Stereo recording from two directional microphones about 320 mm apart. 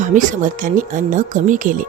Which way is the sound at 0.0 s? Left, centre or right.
Right.